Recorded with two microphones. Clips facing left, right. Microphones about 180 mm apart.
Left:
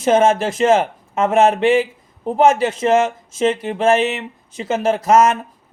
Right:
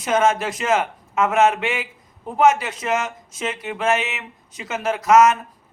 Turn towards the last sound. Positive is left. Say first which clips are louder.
# left 1 dB
turn(degrees=30)  # may be behind; listen again after turning